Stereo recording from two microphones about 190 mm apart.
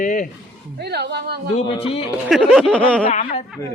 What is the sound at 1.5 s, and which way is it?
Speech, 30° left (ahead or behind).